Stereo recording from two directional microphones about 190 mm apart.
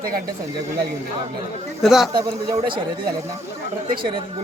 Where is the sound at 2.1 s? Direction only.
25° right (ahead or behind).